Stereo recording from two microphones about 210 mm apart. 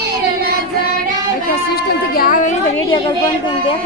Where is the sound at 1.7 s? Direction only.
45° left (ahead or behind).